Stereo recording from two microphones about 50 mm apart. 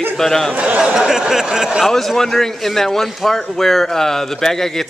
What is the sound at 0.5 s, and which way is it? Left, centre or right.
Speech, right.